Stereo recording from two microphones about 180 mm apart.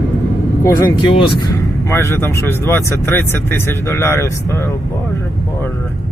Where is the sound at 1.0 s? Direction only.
30° left (ahead or behind).